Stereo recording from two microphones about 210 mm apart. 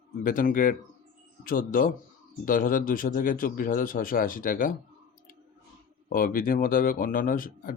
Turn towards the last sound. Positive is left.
turn(degrees=40)  # may be behind; listen again after turning